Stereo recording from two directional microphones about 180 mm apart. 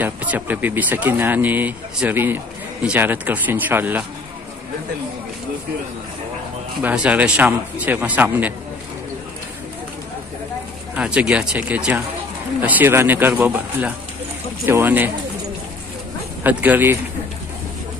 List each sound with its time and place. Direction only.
0.0 s speech: 10° right (ahead or behind)
6.8 s speech: 10° right (ahead or behind)
11.0 s speech: 5° right (ahead or behind)
16.4 s speech: 10° right (ahead or behind)